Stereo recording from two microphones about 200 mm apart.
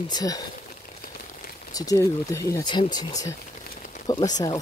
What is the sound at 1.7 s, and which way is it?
Speech, 15° left (ahead or behind).